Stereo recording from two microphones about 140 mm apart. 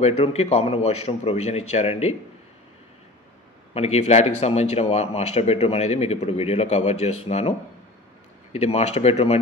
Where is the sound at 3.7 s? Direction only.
50° left (ahead or behind).